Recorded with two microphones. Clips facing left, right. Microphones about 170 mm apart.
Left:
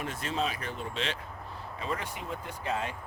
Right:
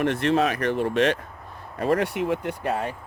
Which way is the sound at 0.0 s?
70° right (ahead or behind).